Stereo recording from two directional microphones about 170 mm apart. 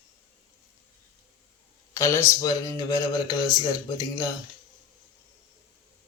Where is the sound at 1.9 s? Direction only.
15° left (ahead or behind).